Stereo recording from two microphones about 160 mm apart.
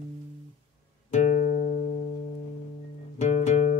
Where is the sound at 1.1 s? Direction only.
50° left (ahead or behind).